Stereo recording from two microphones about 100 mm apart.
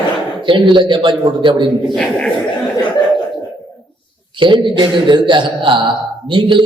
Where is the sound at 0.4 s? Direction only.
55° right (ahead or behind).